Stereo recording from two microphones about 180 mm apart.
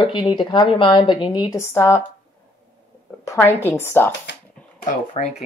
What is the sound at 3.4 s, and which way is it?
Speech, 15° left (ahead or behind).